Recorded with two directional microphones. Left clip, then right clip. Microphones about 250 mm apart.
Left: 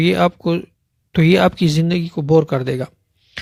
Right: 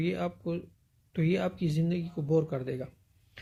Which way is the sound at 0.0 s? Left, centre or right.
Left.